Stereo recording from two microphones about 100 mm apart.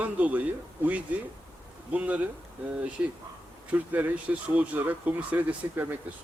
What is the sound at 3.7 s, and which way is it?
Speech, 15° right (ahead or behind).